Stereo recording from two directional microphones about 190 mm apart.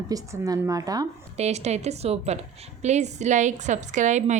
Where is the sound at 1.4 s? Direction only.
35° right (ahead or behind).